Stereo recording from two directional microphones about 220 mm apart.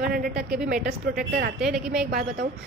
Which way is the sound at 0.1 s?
40° right (ahead or behind).